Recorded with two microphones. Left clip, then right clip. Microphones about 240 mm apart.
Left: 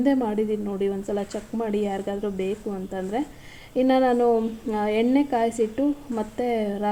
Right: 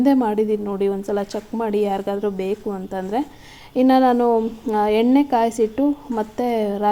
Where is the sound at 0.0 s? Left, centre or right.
Right.